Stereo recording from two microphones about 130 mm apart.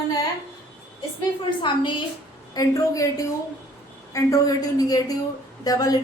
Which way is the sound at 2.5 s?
30° left (ahead or behind).